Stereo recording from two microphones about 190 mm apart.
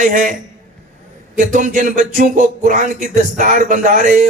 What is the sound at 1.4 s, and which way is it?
A man's voice, 45° right (ahead or behind).